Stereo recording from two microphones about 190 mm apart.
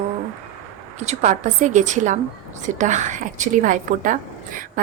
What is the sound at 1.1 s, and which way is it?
A woman's voice, 35° right (ahead or behind).